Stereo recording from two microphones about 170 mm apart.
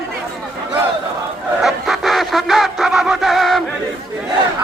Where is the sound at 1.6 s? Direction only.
Centre (ahead or behind).